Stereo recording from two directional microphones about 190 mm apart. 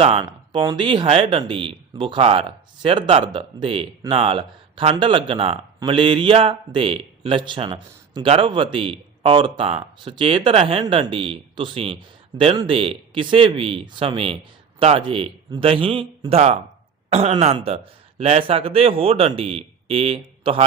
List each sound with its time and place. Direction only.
0.0 s speech: 25° right (ahead or behind)